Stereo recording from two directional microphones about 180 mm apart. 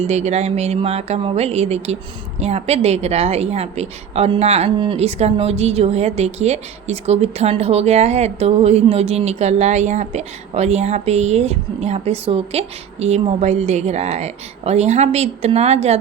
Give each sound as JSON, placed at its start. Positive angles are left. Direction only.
{"t": 0.0, "sound": "a woman's voice", "side_deg": -40}